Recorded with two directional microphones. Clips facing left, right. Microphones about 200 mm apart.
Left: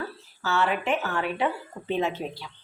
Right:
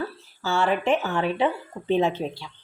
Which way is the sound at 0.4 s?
30° right (ahead or behind).